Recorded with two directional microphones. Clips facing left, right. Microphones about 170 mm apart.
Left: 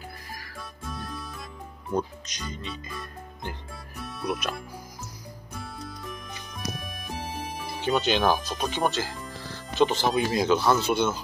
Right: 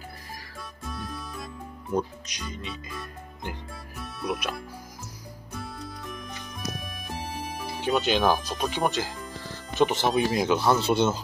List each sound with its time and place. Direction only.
0.6 s music: centre (ahead or behind)
2.0 s speech: 10° right (ahead or behind)
5.6 s music: centre (ahead or behind)
9.8 s speech: 20° right (ahead or behind)